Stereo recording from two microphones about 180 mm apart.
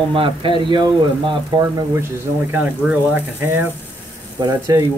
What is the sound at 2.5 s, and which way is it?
Speech, 10° right (ahead or behind).